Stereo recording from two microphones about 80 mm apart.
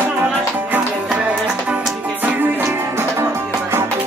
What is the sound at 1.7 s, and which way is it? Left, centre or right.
Music, right.